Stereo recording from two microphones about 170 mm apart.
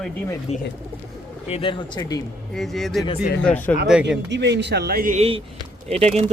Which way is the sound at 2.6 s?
Centre (ahead or behind).